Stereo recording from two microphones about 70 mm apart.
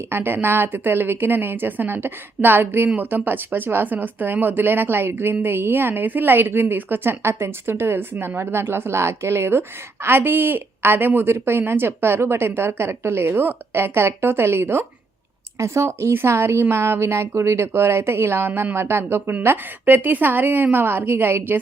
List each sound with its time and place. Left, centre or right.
0.1 s a woman's voice: right